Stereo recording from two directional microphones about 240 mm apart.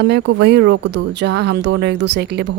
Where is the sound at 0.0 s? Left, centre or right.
Right.